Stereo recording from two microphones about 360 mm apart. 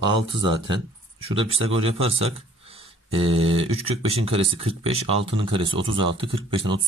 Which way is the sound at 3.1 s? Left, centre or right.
Centre.